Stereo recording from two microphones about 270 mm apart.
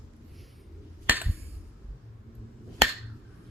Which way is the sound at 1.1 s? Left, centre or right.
Centre.